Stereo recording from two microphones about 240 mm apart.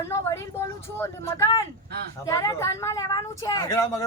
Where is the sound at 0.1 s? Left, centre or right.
Centre.